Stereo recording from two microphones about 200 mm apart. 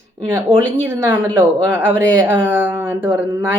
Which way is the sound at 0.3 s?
10° right (ahead or behind).